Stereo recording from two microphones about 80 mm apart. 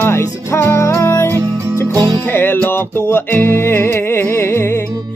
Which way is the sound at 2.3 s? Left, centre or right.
Left.